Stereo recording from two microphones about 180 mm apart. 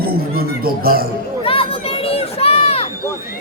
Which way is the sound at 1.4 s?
30° left (ahead or behind).